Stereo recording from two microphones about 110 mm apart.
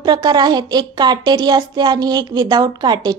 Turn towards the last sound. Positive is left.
turn(degrees=-40)  # may be behind; listen again after turning